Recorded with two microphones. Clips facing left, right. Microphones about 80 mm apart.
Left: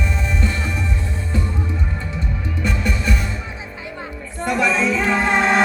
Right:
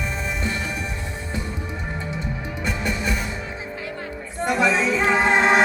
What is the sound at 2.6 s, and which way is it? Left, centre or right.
Music, centre.